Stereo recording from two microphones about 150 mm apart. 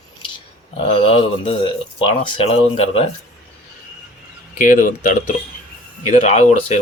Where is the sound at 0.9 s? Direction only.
40° left (ahead or behind).